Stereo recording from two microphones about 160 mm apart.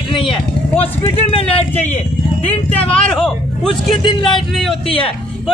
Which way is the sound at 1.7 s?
10° left (ahead or behind).